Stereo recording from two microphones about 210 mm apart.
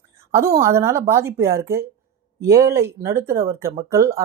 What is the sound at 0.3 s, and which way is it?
Speech, 15° right (ahead or behind).